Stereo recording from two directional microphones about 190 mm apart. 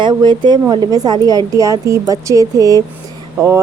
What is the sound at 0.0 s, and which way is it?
Speech, 25° right (ahead or behind).